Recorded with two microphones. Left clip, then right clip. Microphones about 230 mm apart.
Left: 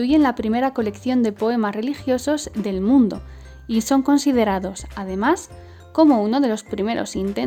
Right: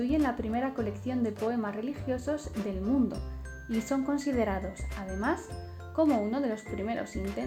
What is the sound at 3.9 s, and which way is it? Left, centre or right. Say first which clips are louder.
Speech: left 13 dB; left.